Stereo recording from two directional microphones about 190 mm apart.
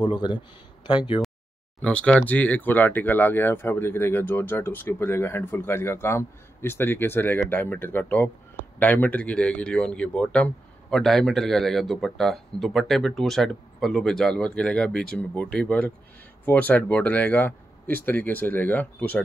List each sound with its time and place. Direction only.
0.0 s speech: 25° left (ahead or behind)
1.8 s speech: 5° left (ahead or behind)